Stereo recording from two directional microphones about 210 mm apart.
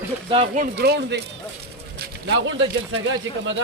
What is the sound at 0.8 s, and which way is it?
Speech, 50° right (ahead or behind).